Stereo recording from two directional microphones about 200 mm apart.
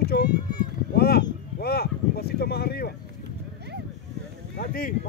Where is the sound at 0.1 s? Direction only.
55° left (ahead or behind).